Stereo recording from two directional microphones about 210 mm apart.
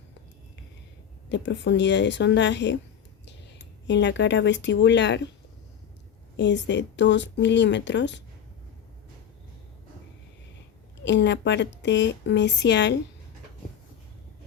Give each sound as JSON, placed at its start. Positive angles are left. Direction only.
{"t": 1.3, "sound": "a woman's voice", "side_deg": 55}
{"t": 3.8, "sound": "a woman's voice", "side_deg": 60}
{"t": 6.3, "sound": "a woman's voice", "side_deg": 55}
{"t": 11.0, "sound": "a woman's voice", "side_deg": 55}